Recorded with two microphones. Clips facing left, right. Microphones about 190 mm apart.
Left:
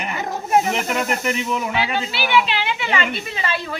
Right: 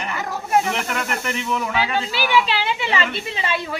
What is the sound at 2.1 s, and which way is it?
A woman's voice, 40° right (ahead or behind).